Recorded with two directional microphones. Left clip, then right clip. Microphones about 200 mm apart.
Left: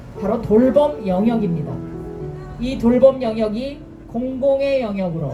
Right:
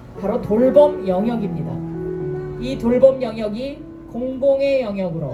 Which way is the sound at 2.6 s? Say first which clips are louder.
Left 1 dB; 25° right (ahead or behind).